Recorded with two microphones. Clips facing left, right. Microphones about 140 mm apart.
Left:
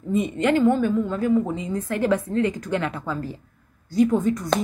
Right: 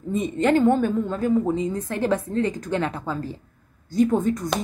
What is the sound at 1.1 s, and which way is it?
A woman's voice, 30° right (ahead or behind).